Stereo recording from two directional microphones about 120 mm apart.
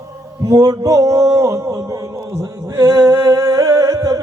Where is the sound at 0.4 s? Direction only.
35° right (ahead or behind).